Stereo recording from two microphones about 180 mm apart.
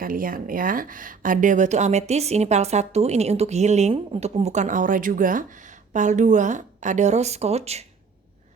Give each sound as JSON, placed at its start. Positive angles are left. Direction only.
{"t": 0.0, "sound": "a woman's voice", "side_deg": -50}